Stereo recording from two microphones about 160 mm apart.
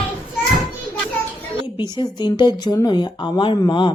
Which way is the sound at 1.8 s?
30° left (ahead or behind).